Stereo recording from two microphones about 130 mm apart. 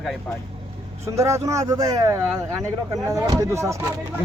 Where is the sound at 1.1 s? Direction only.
25° right (ahead or behind).